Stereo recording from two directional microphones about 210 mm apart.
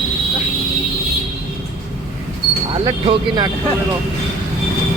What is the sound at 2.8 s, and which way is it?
Speech, 25° right (ahead or behind).